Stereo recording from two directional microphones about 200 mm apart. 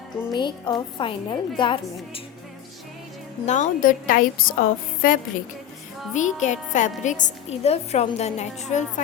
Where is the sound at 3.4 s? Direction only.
40° left (ahead or behind).